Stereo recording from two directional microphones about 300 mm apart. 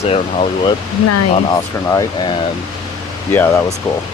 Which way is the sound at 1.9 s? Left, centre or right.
Centre.